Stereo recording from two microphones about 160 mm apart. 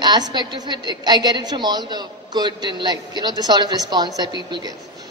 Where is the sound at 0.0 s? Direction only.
25° right (ahead or behind).